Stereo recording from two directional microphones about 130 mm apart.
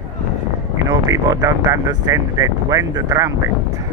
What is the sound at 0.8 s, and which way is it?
Speech, 30° right (ahead or behind).